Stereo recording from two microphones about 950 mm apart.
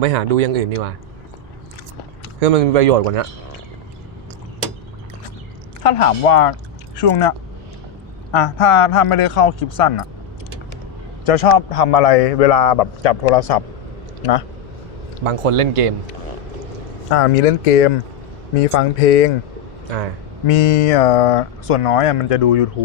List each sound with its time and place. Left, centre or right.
0.0 s speech: right
2.4 s speech: right
5.8 s a man's voice: left
11.3 s a man's voice: left
15.2 s speech: right
17.1 s speech: left
20.5 s a man's voice: left